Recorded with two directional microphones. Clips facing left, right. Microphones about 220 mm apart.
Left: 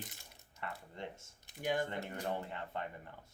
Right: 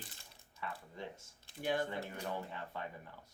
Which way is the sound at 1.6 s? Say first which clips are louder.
Even; 15° left (ahead or behind).